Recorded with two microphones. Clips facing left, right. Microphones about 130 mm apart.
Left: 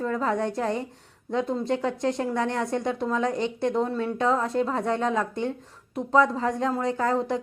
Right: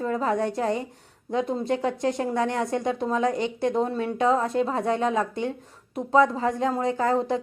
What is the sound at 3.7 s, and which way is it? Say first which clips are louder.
Speech: right 1 dB; 20° right (ahead or behind).